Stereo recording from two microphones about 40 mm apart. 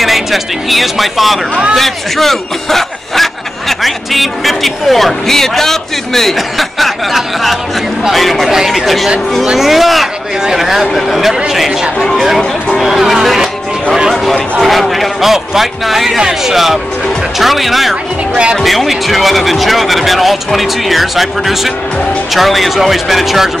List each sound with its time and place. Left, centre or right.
0.0 s speech: centre
12.0 s speech: centre
18.3 s speech: right
18.6 s speech: centre